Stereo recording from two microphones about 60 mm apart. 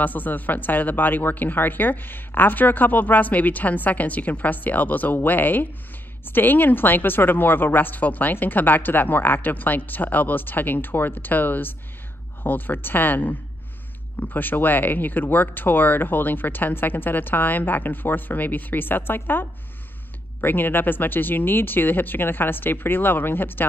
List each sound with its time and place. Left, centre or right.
0.0 s a woman's voice: left